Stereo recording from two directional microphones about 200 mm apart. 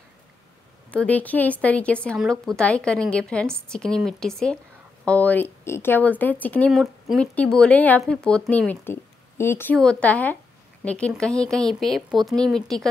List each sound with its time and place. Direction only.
0.9 s speech: 5° left (ahead or behind)